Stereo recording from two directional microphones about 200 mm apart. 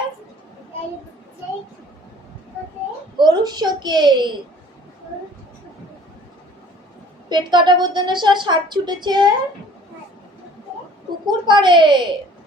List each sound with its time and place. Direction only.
3.2 s a woman's voice: 20° right (ahead or behind)
7.3 s a woman's voice: 20° right (ahead or behind)
11.3 s a woman's voice: 25° right (ahead or behind)